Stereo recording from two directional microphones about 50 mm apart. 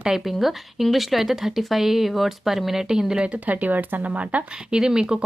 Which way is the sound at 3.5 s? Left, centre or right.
Right.